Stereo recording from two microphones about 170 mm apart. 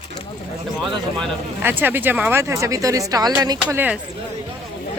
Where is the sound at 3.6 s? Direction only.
10° right (ahead or behind).